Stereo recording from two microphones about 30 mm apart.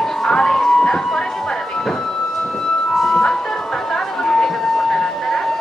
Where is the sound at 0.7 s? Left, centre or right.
Centre.